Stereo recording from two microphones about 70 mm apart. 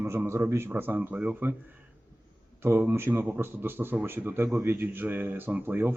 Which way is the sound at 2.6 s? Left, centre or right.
Right.